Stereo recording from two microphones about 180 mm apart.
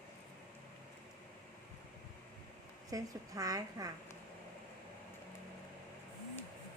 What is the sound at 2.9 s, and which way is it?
A woman's voice, 20° right (ahead or behind).